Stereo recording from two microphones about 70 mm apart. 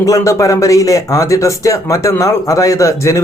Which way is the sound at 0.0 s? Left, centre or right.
Left.